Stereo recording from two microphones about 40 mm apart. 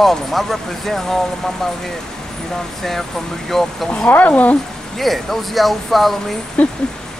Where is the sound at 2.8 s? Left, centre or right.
Centre.